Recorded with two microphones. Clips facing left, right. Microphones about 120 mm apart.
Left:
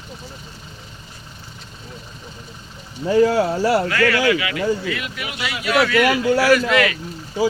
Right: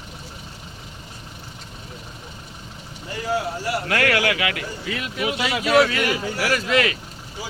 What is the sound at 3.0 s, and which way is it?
Speech, 90° left.